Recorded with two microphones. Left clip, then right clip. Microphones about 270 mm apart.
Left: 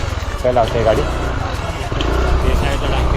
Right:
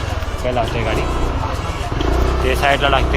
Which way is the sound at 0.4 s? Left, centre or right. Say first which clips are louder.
Left 5 dB; centre.